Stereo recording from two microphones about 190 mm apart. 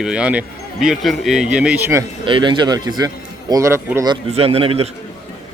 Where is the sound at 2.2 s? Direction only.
25° right (ahead or behind).